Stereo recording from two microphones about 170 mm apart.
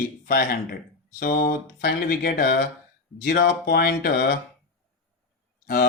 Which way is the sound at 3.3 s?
75° left (ahead or behind).